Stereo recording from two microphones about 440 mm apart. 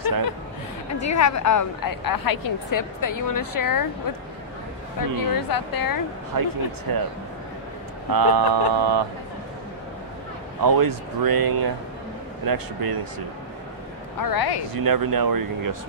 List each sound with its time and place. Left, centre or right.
1.0 s a woman's voice: left
5.0 s a woman's voice: left
6.3 s speech: right
8.1 s speech: right
10.6 s speech: right
14.2 s a woman's voice: left
14.8 s speech: right